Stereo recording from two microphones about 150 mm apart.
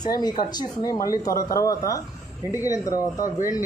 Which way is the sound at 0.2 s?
25° left (ahead or behind).